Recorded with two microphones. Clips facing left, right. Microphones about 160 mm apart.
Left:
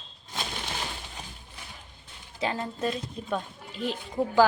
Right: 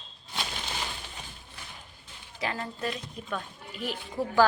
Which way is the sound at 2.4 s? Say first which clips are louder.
Left 3 dB; 25° left (ahead or behind).